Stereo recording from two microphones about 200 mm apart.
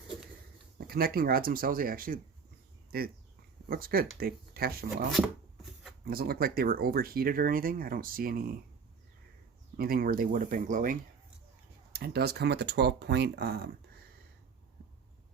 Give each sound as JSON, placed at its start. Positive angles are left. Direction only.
{"t": 0.8, "sound": "speech", "side_deg": -50}
{"t": 6.1, "sound": "speech", "side_deg": -50}
{"t": 9.7, "sound": "speech", "side_deg": -50}
{"t": 11.9, "sound": "speech", "side_deg": -55}